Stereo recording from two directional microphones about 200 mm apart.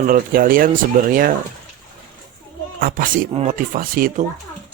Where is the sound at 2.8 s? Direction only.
45° right (ahead or behind).